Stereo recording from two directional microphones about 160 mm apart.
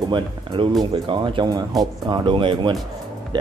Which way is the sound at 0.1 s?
30° right (ahead or behind).